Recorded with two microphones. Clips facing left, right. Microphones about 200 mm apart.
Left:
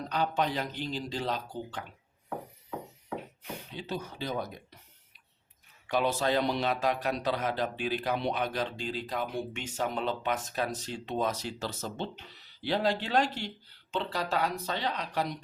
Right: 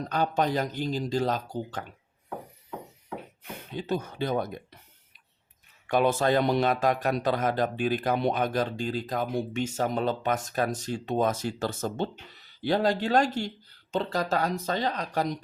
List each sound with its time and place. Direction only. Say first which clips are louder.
0.1 s a man's voice: right 4 dB; 45° right (ahead or behind)
3.7 s a man's voice: right 8 dB; 50° right (ahead or behind)
5.9 s a man's voice: right 5 dB; 50° right (ahead or behind)